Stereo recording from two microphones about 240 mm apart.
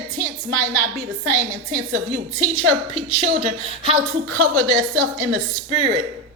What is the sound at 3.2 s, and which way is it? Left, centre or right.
Speech, right.